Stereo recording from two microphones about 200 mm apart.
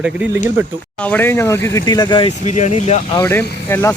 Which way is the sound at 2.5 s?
35° left (ahead or behind).